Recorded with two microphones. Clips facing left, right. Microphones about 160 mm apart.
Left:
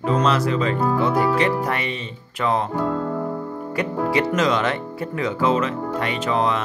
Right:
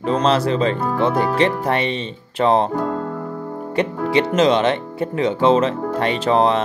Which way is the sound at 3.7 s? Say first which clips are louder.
Right 3 dB; 25° right (ahead or behind).